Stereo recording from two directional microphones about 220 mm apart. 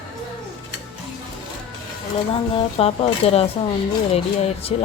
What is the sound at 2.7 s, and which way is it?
Speech, 25° left (ahead or behind).